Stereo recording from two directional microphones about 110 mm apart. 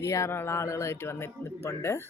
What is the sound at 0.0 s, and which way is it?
Speech, 30° left (ahead or behind).